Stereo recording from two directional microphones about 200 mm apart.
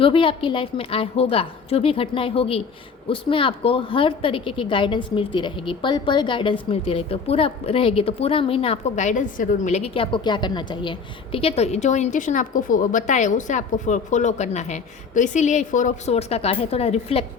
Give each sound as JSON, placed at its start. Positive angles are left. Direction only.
{"t": 0.0, "sound": "a woman's voice", "side_deg": 25}